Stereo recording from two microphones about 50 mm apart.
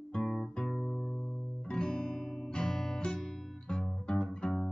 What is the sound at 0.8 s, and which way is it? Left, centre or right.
Music, left.